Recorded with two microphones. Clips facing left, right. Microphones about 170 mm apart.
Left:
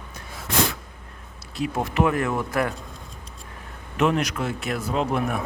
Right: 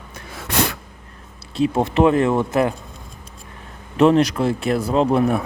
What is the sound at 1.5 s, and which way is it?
Speech, 30° right (ahead or behind).